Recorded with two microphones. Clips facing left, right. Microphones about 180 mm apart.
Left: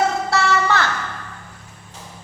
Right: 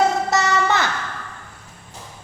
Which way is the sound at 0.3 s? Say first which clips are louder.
Even; 20° right (ahead or behind).